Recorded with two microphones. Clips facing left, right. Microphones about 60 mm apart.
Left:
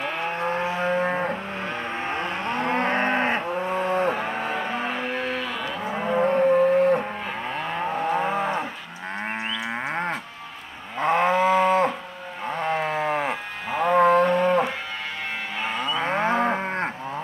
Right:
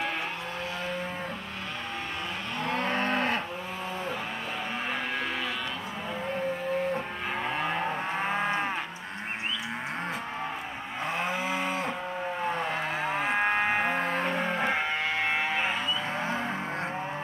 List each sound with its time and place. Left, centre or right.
0.4 s vehicle: left
1.0 s cattle: left
2.5 s moo: left
3.7 s cattle: left
6.0 s livestock: left
11.0 s moo: left
12.8 s livestock: left
13.9 s cattle: left
16.0 s livestock: left